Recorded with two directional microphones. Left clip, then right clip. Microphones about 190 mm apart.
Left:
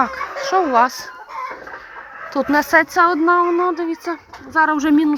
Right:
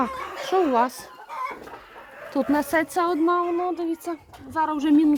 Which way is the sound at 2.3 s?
5° right (ahead or behind).